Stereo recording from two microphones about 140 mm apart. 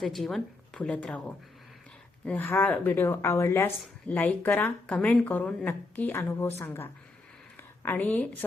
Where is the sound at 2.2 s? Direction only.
10° left (ahead or behind).